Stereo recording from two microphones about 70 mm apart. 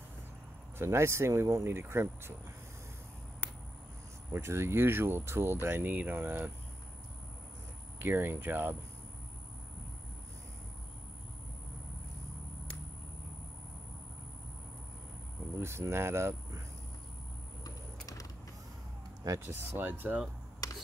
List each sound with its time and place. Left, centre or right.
0.7 s speech: right
4.3 s speech: right
8.0 s speech: right
15.6 s speech: right
19.4 s speech: right
20.6 s a sound: left